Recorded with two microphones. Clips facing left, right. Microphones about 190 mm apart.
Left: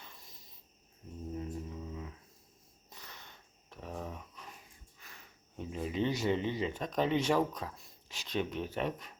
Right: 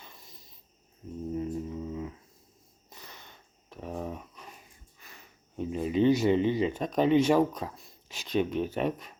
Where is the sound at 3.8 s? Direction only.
20° right (ahead or behind).